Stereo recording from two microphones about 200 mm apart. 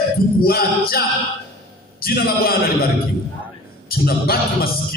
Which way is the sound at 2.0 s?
50° left (ahead or behind).